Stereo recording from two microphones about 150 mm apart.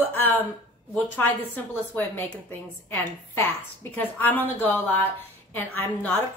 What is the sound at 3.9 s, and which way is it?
A woman's voice, 10° left (ahead or behind).